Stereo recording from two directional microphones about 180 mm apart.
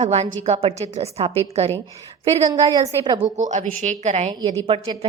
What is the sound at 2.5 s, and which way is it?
Speech, 20° right (ahead or behind).